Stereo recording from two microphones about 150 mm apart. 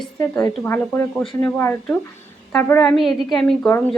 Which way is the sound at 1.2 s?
Centre (ahead or behind).